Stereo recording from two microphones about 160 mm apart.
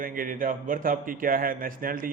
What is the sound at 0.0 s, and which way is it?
A man's voice, 60° right (ahead or behind).